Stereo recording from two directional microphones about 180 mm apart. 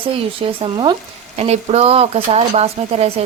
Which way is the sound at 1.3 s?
35° right (ahead or behind).